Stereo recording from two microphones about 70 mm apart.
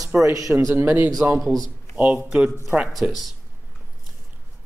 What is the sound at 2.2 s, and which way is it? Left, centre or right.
Speech, centre.